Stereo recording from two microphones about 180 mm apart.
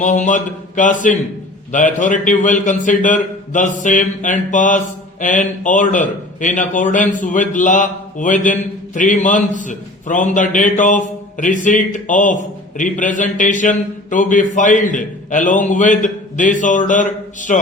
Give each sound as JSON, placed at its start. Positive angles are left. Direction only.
{"t": 0.0, "sound": "a man's voice", "side_deg": 45}